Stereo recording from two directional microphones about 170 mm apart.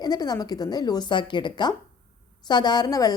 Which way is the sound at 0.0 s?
25° left (ahead or behind).